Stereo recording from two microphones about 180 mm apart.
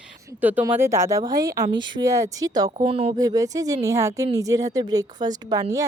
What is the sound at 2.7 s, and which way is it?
Speech, 30° right (ahead or behind).